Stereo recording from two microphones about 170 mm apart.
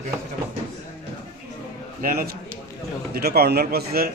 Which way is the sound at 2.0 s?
60° right (ahead or behind).